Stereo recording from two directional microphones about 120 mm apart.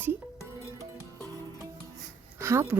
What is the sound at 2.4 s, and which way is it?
Speech, 20° right (ahead or behind).